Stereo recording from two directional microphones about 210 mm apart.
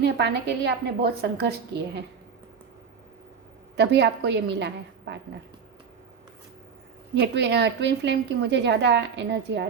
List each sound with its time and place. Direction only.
0.0 s a woman's voice: 55° right (ahead or behind)
3.8 s a woman's voice: 55° right (ahead or behind)
7.1 s a woman's voice: 55° right (ahead or behind)